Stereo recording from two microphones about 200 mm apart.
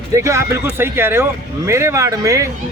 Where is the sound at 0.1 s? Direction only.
15° right (ahead or behind).